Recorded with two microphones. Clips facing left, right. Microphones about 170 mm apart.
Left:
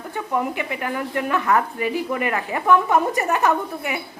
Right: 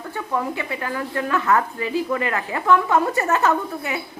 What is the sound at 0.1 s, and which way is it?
Speech, 15° left (ahead or behind).